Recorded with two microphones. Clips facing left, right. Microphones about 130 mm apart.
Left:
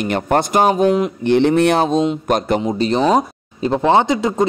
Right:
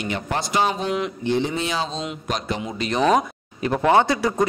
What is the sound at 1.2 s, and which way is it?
Speech, 65° left (ahead or behind).